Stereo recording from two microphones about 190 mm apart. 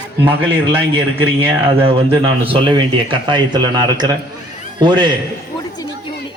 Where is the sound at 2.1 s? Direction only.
30° right (ahead or behind).